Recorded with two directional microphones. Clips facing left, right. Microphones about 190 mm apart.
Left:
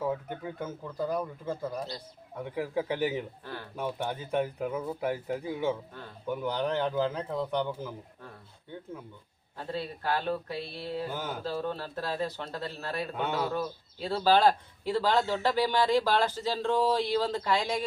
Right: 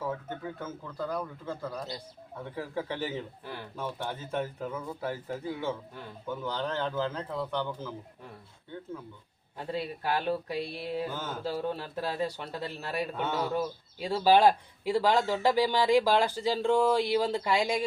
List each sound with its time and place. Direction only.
0.0 s a man's voice: 15° left (ahead or behind)
9.6 s speech: 10° right (ahead or behind)
11.1 s a man's voice: 15° left (ahead or behind)
11.4 s speech: 10° right (ahead or behind)
13.1 s a man's voice: 15° left (ahead or behind)
13.5 s speech: 15° right (ahead or behind)